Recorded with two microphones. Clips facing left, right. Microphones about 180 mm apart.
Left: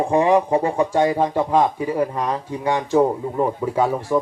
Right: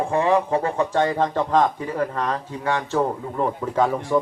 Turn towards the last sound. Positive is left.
turn(degrees=10)  # may be behind; listen again after turning